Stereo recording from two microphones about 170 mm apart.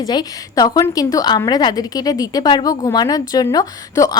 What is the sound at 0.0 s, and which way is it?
A woman's voice, 25° left (ahead or behind).